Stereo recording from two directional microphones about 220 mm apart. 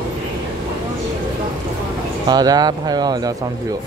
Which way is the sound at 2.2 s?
20° right (ahead or behind).